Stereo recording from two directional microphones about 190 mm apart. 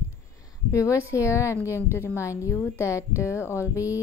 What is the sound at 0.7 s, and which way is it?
A woman's voice, 15° left (ahead or behind).